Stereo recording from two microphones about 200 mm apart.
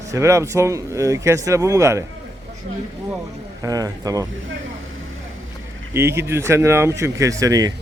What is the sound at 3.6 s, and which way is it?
Speech, 15° right (ahead or behind).